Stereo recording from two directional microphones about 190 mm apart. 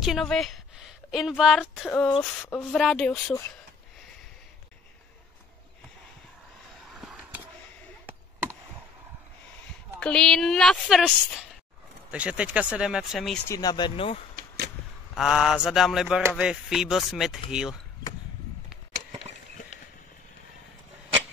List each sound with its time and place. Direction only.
0.0 s speech: centre (ahead or behind)
1.9 s speech: 10° left (ahead or behind)
6.9 s a sound: 5° right (ahead or behind)
9.9 s speech: 5° left (ahead or behind)
13.5 s speech: 20° left (ahead or behind)
15.1 s speech: centre (ahead or behind)